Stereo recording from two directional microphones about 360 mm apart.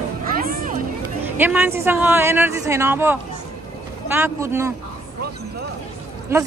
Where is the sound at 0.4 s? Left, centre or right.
Right.